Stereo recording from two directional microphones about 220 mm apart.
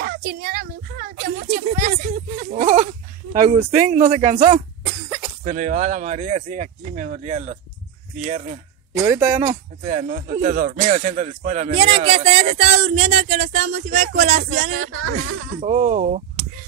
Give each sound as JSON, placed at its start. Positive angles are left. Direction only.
{"t": 0.0, "sound": "a child's voice", "side_deg": -45}
{"t": 8.9, "sound": "speech", "side_deg": -10}
{"t": 9.8, "sound": "speech", "side_deg": -35}
{"t": 14.9, "sound": "speech", "side_deg": -80}
{"t": 15.6, "sound": "speech", "side_deg": -25}